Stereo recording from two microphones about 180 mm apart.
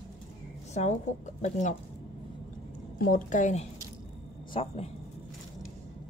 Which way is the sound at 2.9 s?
50° left (ahead or behind).